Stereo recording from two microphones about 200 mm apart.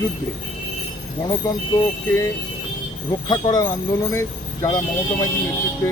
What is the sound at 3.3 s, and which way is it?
Speech, 20° left (ahead or behind).